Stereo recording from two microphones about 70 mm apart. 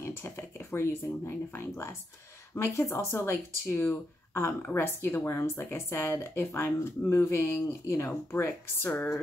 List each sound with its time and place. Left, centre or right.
0.0 s a woman's voice: left